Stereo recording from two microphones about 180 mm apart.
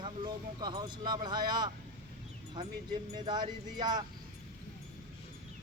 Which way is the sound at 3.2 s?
25° right (ahead or behind).